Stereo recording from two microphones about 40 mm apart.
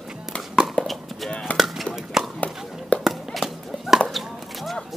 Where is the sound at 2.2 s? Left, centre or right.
Centre.